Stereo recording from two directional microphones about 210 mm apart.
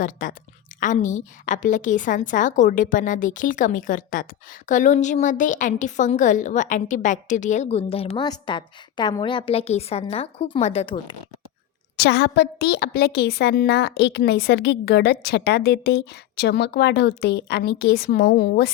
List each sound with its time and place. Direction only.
0.0 s a woman's voice: 40° left (ahead or behind); by 11.2 s 25° left (ahead or behind)
11.9 s a woman's voice: 50° left (ahead or behind)